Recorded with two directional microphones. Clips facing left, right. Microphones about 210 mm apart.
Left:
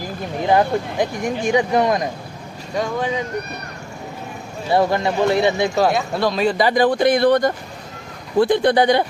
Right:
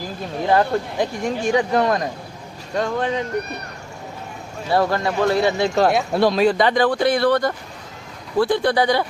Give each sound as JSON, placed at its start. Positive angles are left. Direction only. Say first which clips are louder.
{"t": 0.4, "sound": "speech", "louder": "left 1 dB", "side_deg": 15}
{"t": 4.7, "sound": "speech", "louder": "left 2 dB", "side_deg": 20}
{"t": 5.9, "sound": "speech", "louder": "right 2 dB", "side_deg": -5}